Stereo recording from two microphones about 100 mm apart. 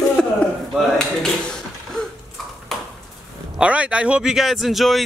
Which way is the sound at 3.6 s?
10° right (ahead or behind).